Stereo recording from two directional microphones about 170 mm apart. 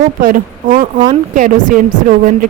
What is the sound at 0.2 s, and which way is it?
A woman's voice, 50° right (ahead or behind).